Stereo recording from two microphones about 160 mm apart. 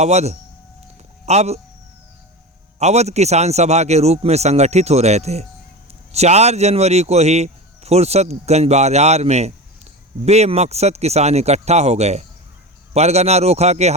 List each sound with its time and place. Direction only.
0.0 s speech: 45° right (ahead or behind)
2.7 s speech: 45° right (ahead or behind)